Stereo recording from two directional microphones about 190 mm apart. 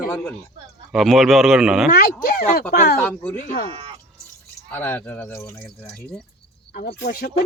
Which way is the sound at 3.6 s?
30° right (ahead or behind).